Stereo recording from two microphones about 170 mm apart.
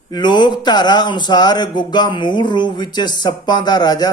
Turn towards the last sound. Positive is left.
turn(degrees=25)  # may be behind; listen again after turning